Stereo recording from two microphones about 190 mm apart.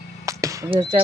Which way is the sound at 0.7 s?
30° right (ahead or behind).